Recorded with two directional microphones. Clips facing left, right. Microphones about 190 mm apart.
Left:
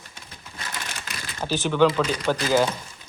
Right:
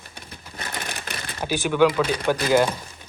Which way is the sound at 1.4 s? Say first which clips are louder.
Right 1 dB; 10° right (ahead or behind).